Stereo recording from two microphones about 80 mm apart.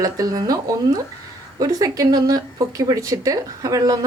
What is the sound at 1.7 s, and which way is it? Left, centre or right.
Speech, right.